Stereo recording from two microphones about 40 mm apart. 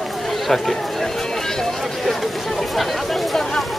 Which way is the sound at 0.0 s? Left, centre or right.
Centre.